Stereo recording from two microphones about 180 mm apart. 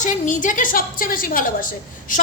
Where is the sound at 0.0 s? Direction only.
45° left (ahead or behind).